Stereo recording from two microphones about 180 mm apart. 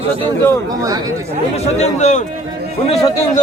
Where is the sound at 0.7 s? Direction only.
20° right (ahead or behind).